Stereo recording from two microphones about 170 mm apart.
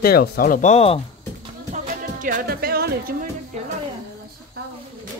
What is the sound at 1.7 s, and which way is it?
Speech, 50° right (ahead or behind).